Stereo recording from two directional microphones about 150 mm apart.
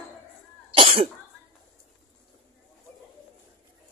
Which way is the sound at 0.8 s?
35° right (ahead or behind).